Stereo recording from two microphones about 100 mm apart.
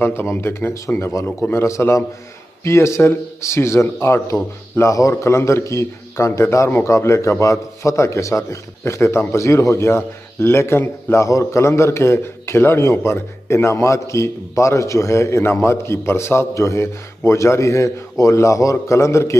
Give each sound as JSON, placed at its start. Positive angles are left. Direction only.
{"t": 0.0, "sound": "a man's voice", "side_deg": 25}